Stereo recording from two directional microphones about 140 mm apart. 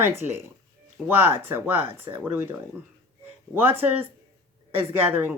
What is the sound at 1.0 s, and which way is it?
Speech, 15° right (ahead or behind).